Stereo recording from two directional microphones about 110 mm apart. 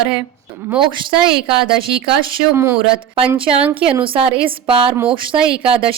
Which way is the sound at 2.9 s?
55° right (ahead or behind).